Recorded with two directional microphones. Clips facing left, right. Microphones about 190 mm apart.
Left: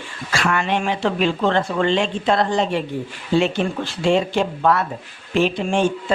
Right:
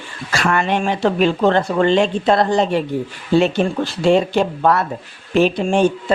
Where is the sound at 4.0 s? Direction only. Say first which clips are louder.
Right 3 dB; 40° right (ahead or behind).